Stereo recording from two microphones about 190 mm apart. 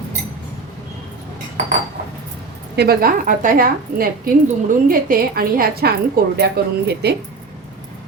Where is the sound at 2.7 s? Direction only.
50° right (ahead or behind).